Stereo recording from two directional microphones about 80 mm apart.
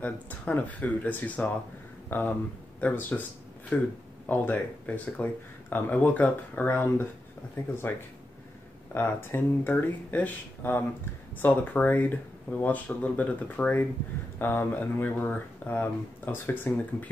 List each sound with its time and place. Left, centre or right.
0.0 s speech: left